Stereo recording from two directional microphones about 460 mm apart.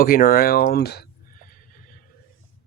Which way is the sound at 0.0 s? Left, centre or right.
Centre.